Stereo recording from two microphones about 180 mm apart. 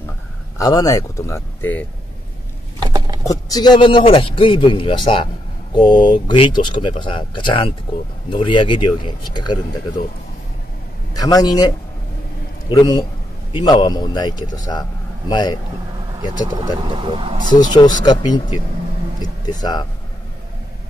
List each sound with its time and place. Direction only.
0.6 s speech: 20° left (ahead or behind)
2.8 s patter: 20° right (ahead or behind)
3.3 s a man's voice: 20° left (ahead or behind)
11.1 s a man's voice: 20° left (ahead or behind)
16.1 s speech: 20° right (ahead or behind)
17.5 s a man's voice: 20° left (ahead or behind)